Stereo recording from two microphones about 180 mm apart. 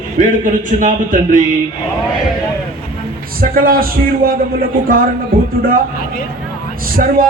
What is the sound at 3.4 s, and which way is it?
Speech, 50° right (ahead or behind).